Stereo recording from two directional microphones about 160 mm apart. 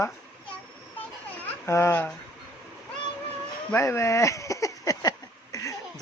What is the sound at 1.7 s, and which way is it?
Speech, 15° left (ahead or behind).